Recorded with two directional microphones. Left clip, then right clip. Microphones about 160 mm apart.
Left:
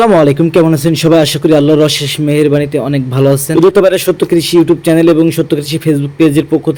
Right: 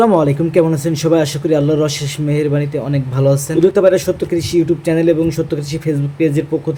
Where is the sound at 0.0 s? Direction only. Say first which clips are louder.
Left 5 dB; 30° left (ahead or behind).